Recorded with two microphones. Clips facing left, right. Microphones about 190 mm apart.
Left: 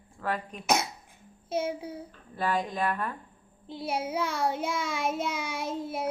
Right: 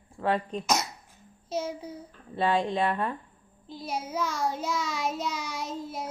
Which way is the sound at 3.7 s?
60° left (ahead or behind).